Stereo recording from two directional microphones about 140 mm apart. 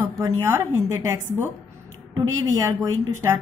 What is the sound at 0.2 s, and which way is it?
A woman's voice, 20° right (ahead or behind).